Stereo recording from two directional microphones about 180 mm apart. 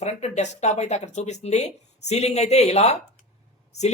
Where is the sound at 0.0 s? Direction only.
40° left (ahead or behind).